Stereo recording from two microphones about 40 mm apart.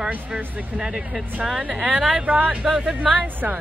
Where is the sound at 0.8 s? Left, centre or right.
Centre.